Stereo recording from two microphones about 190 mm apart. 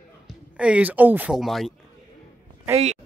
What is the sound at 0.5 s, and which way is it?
Speech, 5° right (ahead or behind).